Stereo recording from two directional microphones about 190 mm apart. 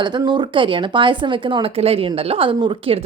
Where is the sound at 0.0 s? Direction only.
25° right (ahead or behind).